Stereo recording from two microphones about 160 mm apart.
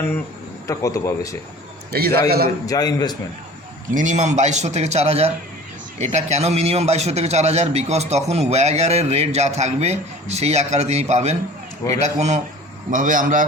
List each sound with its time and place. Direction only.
0.7 s a man's voice: 20° left (ahead or behind)
1.9 s a man's voice: 75° right (ahead or behind)
2.6 s a man's voice: 25° left (ahead or behind)
3.9 s a man's voice: 50° right (ahead or behind)
12.9 s a man's voice: 55° right (ahead or behind)